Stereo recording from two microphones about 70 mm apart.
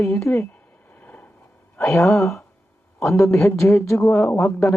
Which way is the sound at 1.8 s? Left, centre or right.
Left.